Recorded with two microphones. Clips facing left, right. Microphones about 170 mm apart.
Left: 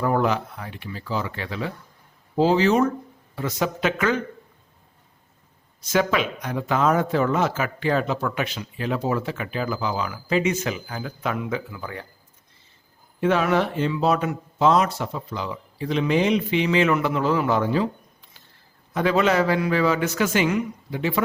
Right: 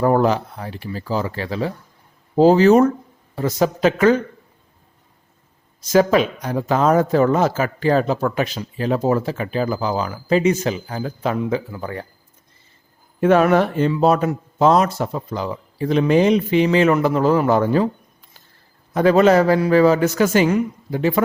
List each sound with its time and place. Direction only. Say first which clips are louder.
0.0 s speech: right 5 dB; 40° right (ahead or behind)
5.9 s speech: right 7 dB; 35° right (ahead or behind)
13.1 s speech: right 6 dB; 50° right (ahead or behind)
18.9 s speech: right 7 dB; 40° right (ahead or behind)